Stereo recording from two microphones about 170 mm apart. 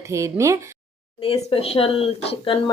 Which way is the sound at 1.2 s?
35° left (ahead or behind).